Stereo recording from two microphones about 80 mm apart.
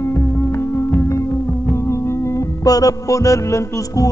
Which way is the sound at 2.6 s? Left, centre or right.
Left.